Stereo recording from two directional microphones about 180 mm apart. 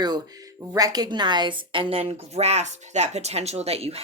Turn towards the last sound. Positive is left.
turn(degrees=-35)  # may be behind; listen again after turning